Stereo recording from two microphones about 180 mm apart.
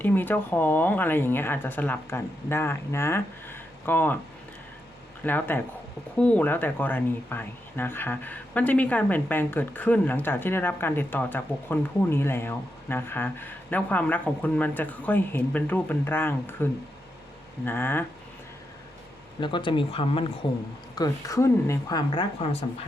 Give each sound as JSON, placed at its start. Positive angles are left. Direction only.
{"t": 0.0, "sound": "speech", "side_deg": 10}
{"t": 5.2, "sound": "speech", "side_deg": 10}
{"t": 17.7, "sound": "speech", "side_deg": 10}
{"t": 19.4, "sound": "a woman's voice", "side_deg": 25}